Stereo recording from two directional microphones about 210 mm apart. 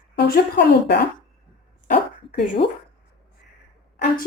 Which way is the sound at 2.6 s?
25° left (ahead or behind).